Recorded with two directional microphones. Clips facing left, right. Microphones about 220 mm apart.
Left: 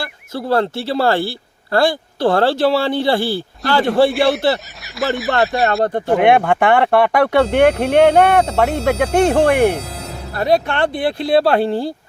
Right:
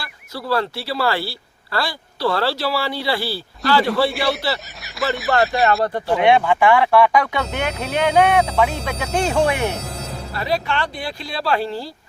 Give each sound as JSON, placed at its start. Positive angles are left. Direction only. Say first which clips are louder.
{"t": 0.5, "sound": "a man's voice", "louder": "left 5 dB", "side_deg": 50}
{"t": 4.3, "sound": "speech", "louder": "left 6 dB", "side_deg": 0}
{"t": 5.8, "sound": "speech", "louder": "left 3 dB", "side_deg": 50}